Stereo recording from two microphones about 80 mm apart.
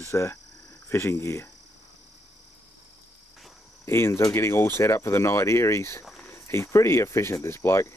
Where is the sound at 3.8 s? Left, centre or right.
Left.